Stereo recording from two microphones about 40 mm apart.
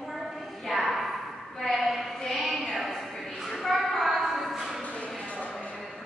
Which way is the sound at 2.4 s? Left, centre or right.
Centre.